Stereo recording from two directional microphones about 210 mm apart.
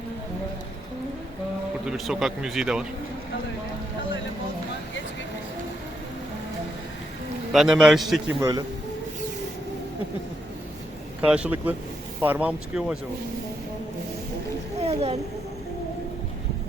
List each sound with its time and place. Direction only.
1.9 s a man's voice: centre (ahead or behind)
7.5 s a man's voice: centre (ahead or behind)
8.4 s speech: 15° right (ahead or behind)
11.2 s speech: 5° right (ahead or behind)
14.8 s a sound: 30° right (ahead or behind)